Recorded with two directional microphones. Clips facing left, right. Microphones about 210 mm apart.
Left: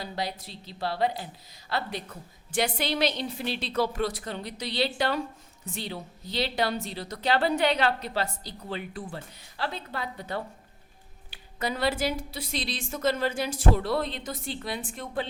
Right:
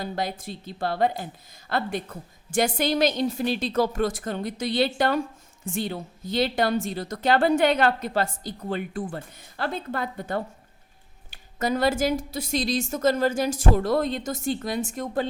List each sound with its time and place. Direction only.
0.0 s a woman's voice: 50° right (ahead or behind)